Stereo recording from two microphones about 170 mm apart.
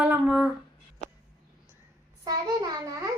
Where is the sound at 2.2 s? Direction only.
25° right (ahead or behind).